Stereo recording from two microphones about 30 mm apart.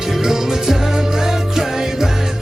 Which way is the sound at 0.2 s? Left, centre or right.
Centre.